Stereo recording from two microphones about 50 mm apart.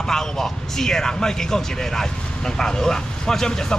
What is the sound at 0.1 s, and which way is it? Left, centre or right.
A man's voice, centre.